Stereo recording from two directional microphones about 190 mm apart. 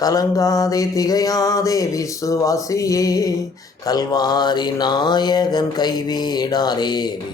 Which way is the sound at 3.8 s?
20° left (ahead or behind).